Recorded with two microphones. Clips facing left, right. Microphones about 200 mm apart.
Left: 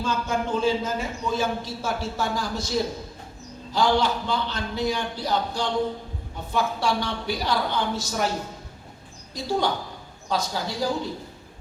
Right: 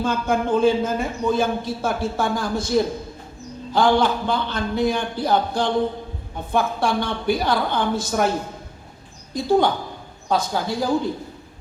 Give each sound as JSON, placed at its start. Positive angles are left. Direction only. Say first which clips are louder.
{"t": 0.0, "sound": "a man's voice", "louder": "right 5 dB", "side_deg": -55}